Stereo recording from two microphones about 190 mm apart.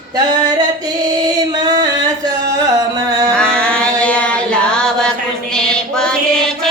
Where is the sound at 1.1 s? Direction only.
20° right (ahead or behind).